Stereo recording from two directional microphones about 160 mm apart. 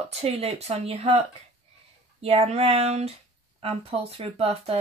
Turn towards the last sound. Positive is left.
turn(degrees=-35)  # may be behind; listen again after turning